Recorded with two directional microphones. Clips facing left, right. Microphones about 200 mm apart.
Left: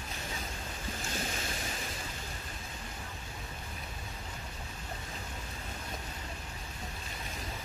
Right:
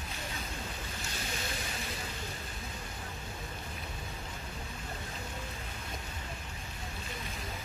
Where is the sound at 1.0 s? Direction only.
40° left (ahead or behind).